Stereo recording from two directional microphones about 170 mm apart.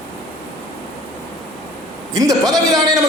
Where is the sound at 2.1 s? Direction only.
20° right (ahead or behind).